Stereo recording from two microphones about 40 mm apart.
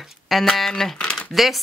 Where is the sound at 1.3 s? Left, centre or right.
Centre.